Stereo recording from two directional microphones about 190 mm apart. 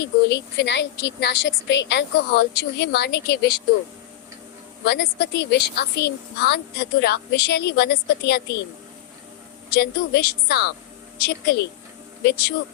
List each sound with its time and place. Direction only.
0.0 s a woman's voice: 65° left (ahead or behind)
4.9 s a woman's voice: 60° left (ahead or behind)
9.7 s a woman's voice: 60° left (ahead or behind)